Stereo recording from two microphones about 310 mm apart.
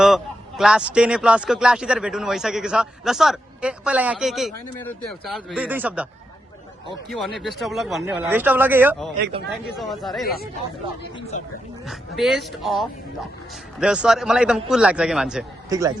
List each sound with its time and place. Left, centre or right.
0.0 s a man's voice: centre
7.3 s a man's voice: centre
11.3 s speech: left
11.9 s a man's voice: centre